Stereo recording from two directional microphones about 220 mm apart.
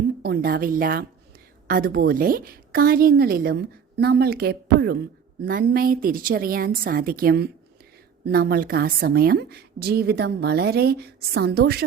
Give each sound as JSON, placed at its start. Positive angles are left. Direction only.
{"t": 0.2, "sound": "a woman's voice", "side_deg": -45}